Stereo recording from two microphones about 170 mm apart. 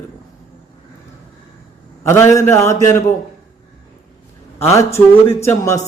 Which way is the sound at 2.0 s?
15° left (ahead or behind).